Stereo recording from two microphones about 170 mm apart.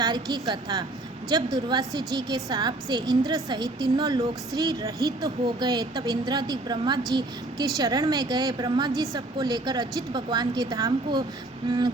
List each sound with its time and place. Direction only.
0.0 s a woman's voice: 25° right (ahead or behind)